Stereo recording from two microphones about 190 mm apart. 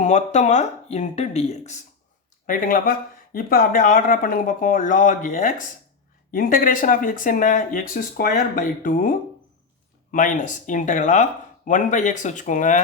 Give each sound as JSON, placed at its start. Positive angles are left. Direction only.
{"t": 0.0, "sound": "speech", "side_deg": 35}
{"t": 2.5, "sound": "speech", "side_deg": 45}